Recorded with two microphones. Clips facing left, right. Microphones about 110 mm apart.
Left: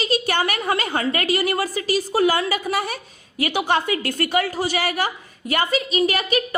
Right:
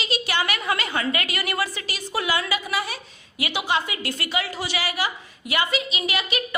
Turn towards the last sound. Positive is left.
turn(degrees=45)  # may be behind; listen again after turning